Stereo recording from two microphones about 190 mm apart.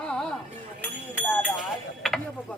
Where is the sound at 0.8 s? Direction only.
10° left (ahead or behind).